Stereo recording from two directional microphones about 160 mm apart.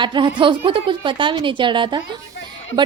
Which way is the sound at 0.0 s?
30° right (ahead or behind).